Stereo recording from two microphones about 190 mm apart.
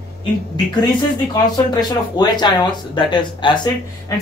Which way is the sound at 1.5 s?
20° left (ahead or behind).